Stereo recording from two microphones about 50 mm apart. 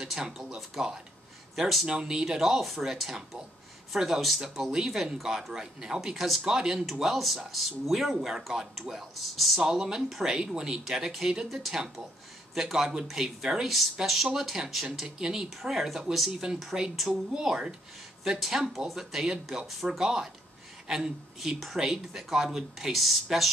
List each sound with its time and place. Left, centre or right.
0.0 s speech: centre
1.9 s speech: centre
6.1 s speech: centre
6.4 s a woman's voice: centre